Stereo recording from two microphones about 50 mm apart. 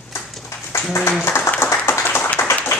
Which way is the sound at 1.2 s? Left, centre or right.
Left.